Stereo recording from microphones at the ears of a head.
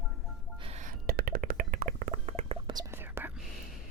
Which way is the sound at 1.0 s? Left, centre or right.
Right.